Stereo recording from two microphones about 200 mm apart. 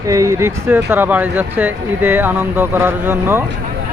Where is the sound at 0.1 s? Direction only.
15° right (ahead or behind).